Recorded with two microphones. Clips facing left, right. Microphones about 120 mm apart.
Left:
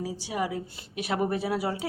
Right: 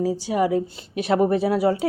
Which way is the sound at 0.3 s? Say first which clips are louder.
Right 8 dB; 25° right (ahead or behind).